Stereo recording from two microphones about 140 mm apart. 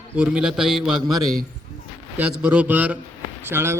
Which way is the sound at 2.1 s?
10° right (ahead or behind).